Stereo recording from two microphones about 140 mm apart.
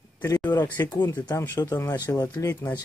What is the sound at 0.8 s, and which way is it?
Speech, 25° left (ahead or behind).